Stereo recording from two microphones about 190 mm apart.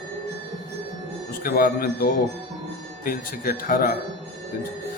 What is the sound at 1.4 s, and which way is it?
A man's voice, 50° left (ahead or behind).